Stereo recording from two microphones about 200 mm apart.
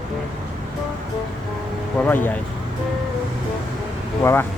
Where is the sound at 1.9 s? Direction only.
10° left (ahead or behind).